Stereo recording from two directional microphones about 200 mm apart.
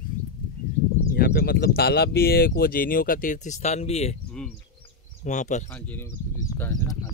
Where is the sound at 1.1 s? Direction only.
50° left (ahead or behind); by 4.1 s 30° left (ahead or behind).